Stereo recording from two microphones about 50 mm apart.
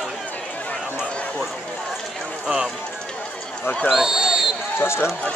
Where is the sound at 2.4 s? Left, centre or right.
Centre.